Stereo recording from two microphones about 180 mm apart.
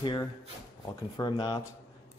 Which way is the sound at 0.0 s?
25° left (ahead or behind).